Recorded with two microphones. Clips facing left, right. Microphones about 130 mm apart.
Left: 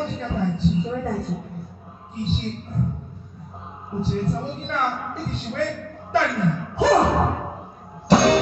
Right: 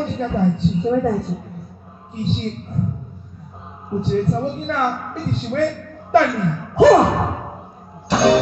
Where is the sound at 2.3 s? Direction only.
Centre (ahead or behind).